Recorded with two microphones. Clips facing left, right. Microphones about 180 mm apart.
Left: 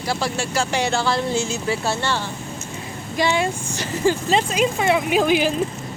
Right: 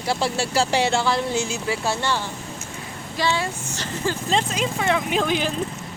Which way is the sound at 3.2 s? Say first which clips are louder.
Left 4 dB; 15° left (ahead or behind).